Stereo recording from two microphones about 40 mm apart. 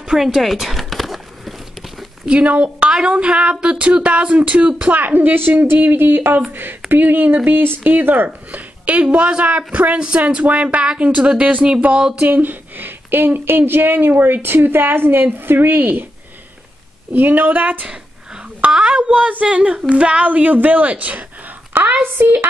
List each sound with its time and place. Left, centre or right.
0.2 s a sound: centre
2.2 s speech: right
4.9 s a woman's voice: right
8.5 s a sound: right
9.4 s speech: right
10.4 s speech: right
12.2 s a woman's voice: right
17.1 s a woman's voice: right
17.8 s a sound: right
18.9 s speech: right
20.2 s a woman's voice: right
22.0 s a woman's voice: right